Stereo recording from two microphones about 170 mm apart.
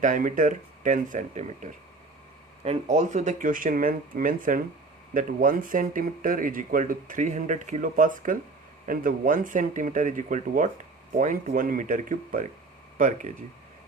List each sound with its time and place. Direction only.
0.0 s speech: 50° right (ahead or behind)